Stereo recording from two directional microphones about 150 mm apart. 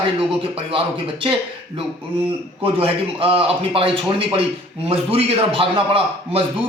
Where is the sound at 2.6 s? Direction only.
40° right (ahead or behind).